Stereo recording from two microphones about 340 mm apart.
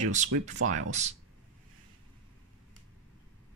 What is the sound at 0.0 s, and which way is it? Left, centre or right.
Speech, right.